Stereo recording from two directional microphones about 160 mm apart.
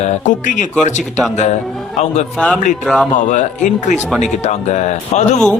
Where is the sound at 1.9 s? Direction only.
45° left (ahead or behind).